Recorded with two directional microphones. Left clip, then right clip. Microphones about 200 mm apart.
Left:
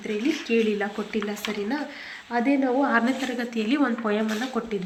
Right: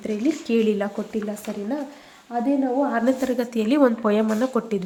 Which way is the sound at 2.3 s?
15° right (ahead or behind).